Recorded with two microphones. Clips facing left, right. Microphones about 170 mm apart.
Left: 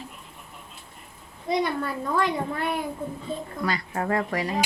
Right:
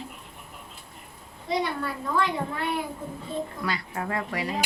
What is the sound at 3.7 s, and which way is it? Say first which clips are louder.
Speech: left 4 dB; 45° left (ahead or behind).